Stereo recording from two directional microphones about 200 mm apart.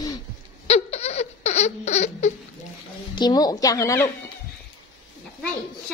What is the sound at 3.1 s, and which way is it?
Speech, 20° left (ahead or behind).